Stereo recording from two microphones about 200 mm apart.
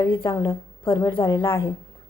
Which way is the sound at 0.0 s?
20° left (ahead or behind).